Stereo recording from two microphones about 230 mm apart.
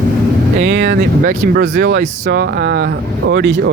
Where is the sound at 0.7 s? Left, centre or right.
Right.